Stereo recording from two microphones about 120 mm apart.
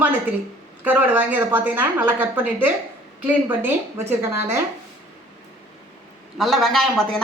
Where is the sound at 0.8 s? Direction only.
15° right (ahead or behind).